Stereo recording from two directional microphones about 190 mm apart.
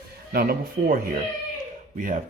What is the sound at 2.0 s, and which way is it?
Speech, 45° right (ahead or behind).